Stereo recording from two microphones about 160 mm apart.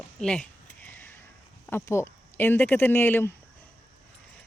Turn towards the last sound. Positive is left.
turn(degrees=15)  # may be behind; listen again after turning